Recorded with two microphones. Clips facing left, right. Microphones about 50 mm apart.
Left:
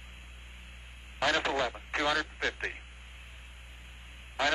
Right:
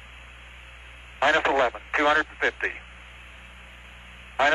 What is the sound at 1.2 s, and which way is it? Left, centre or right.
A man's voice, right.